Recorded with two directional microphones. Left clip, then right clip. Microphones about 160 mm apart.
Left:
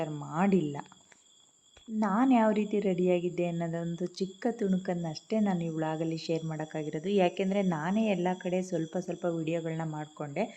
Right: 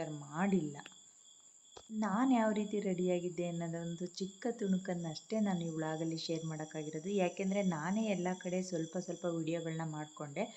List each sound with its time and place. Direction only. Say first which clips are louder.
0.0 s speech: left 7 dB; 30° left (ahead or behind)
2.0 s a woman's voice: left 7 dB; 30° left (ahead or behind)